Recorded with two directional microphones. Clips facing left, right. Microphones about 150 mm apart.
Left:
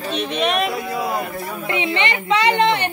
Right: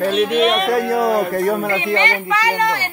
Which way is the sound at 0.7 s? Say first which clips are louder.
Right 7 dB; 60° right (ahead or behind).